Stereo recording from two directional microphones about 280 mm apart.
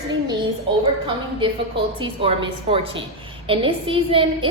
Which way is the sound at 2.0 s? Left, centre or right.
Centre.